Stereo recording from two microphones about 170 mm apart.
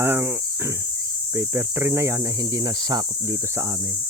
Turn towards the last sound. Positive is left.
turn(degrees=-20)  # may be behind; listen again after turning